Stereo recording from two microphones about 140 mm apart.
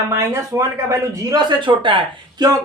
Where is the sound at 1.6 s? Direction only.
35° right (ahead or behind).